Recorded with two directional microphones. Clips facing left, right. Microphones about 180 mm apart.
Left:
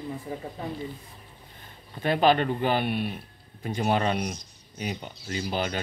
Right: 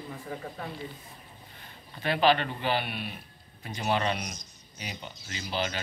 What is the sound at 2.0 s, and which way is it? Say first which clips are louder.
Speech: left 3 dB; 45° left (ahead or behind).